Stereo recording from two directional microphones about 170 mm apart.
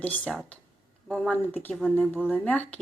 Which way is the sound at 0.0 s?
10° left (ahead or behind).